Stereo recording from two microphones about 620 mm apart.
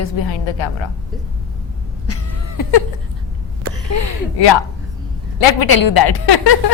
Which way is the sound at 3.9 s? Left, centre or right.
Left.